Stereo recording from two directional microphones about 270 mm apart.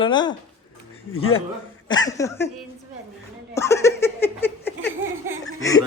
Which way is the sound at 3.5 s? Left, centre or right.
Centre.